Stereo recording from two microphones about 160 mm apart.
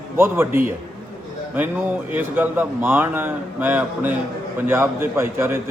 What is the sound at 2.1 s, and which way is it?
A man's voice, 10° right (ahead or behind).